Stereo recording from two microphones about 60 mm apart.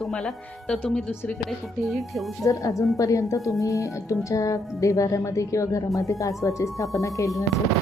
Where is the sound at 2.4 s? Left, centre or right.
Left.